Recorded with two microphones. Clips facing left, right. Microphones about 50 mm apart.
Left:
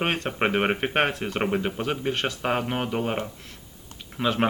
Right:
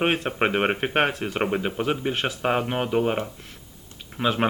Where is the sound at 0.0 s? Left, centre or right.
Centre.